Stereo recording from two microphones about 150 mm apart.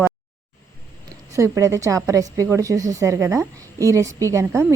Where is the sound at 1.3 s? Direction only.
20° right (ahead or behind).